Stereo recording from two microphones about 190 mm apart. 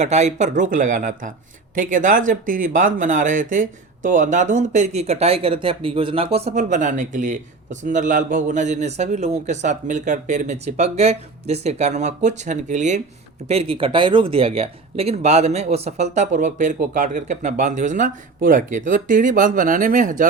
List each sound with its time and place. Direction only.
0.0 s speech: 35° right (ahead or behind)